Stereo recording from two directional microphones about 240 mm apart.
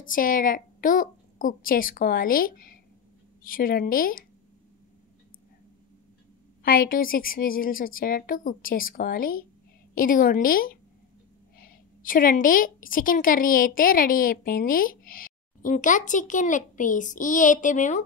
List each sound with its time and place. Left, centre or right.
0.0 s a woman's voice: left
6.6 s a woman's voice: left